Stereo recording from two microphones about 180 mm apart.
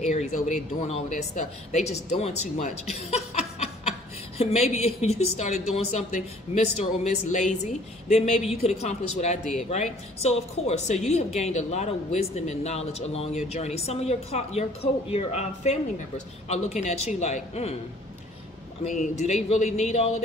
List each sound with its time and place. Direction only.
0.0 s speech: 40° left (ahead or behind)
18.9 s speech: 40° left (ahead or behind)